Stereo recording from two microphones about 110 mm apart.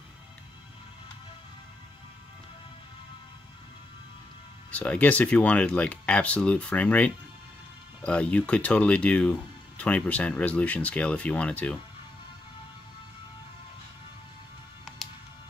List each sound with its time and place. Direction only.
4.7 s speech: 10° left (ahead or behind)